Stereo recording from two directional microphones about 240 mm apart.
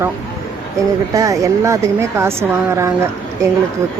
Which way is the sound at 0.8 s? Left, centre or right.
Centre.